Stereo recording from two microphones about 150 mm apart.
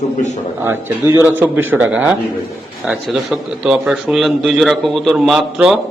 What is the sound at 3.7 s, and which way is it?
A man's voice, 5° right (ahead or behind).